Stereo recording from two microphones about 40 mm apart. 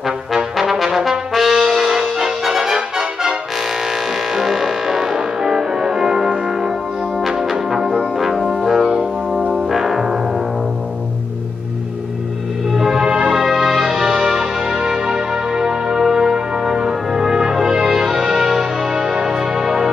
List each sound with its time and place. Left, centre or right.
0.6 s brass instrument: centre
4.3 s music: centre
7.7 s brass instrument: centre
9.5 s music: centre
12.7 s music: centre
13.0 s music: right
13.3 s music: centre